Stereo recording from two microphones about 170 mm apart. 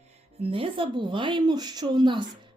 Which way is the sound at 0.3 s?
35° right (ahead or behind).